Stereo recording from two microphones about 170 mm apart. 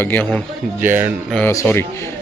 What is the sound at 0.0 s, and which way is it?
Speech, 10° left (ahead or behind).